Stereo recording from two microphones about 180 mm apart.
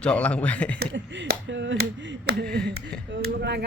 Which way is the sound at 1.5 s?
85° right.